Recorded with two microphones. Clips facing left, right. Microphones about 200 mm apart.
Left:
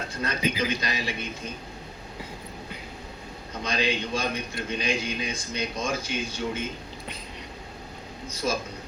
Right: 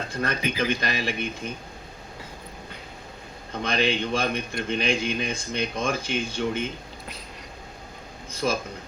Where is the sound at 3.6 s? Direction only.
55° right (ahead or behind).